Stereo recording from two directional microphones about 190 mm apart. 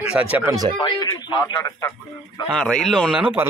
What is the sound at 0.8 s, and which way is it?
Speech, 25° left (ahead or behind).